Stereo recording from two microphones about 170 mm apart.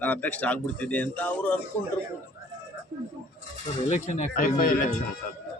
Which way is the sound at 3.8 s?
45° left (ahead or behind).